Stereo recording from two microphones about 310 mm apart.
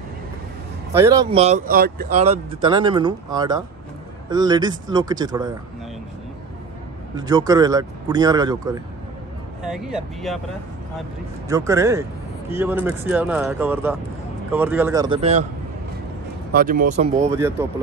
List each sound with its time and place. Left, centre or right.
0.9 s speech: centre
7.2 s speech: centre
9.6 s speech: centre
11.4 s speech: centre
16.5 s speech: right
17.3 s speech: centre